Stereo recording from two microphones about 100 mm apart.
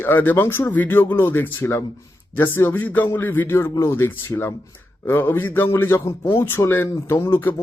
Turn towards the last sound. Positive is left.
turn(degrees=20)  # may be behind; listen again after turning